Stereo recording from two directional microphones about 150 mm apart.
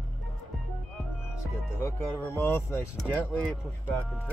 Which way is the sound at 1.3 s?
15° left (ahead or behind).